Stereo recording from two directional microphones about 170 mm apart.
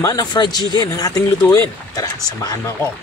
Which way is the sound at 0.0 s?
20° left (ahead or behind).